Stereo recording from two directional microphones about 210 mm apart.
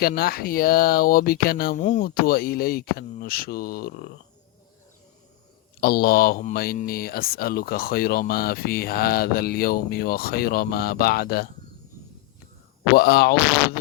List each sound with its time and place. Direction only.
0.0 s speech: 45° left (ahead or behind)
5.8 s speech: 45° left (ahead or behind)
12.9 s speech: 50° left (ahead or behind)